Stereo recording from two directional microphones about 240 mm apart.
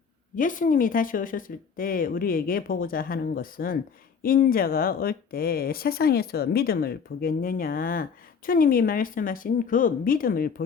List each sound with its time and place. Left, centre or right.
0.3 s speech: left